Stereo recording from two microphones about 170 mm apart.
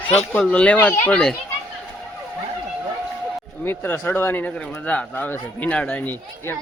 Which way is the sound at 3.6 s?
10° left (ahead or behind).